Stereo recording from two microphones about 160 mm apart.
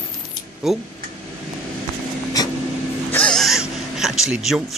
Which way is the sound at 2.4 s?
25° left (ahead or behind).